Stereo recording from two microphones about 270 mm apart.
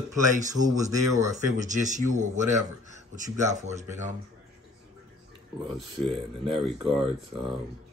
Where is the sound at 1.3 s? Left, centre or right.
Right.